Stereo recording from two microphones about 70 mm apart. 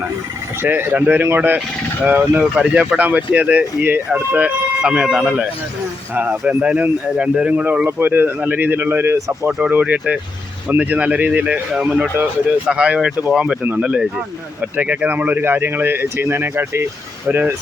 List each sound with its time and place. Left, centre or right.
0.6 s speech: right; by 5.3 s centre
6.5 s speech: centre
9.1 s speech: right
9.6 s speech: right
14.8 s speech: right